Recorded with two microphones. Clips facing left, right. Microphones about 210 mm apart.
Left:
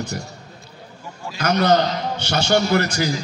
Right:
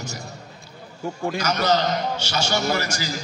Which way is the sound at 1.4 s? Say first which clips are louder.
Left 5 dB; 60° left (ahead or behind).